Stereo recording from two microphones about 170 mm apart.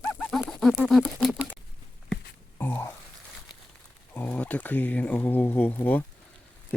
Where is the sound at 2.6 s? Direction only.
15° left (ahead or behind).